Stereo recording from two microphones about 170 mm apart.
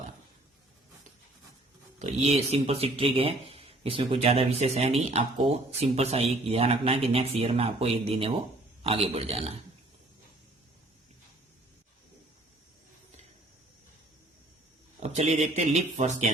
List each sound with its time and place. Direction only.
2.0 s speech: 40° right (ahead or behind)
15.0 s speech: 40° right (ahead or behind)